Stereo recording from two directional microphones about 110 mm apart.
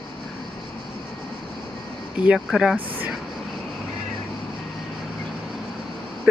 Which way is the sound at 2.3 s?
Centre (ahead or behind).